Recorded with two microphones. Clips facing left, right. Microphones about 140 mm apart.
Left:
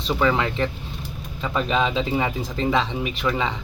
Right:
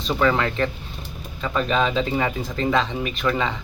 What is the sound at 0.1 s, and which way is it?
Speech, 15° left (ahead or behind).